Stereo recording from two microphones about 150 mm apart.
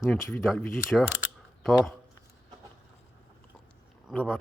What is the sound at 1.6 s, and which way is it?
Speech, centre (ahead or behind).